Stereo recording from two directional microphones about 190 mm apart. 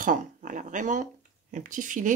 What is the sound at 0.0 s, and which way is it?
Speech, 45° right (ahead or behind).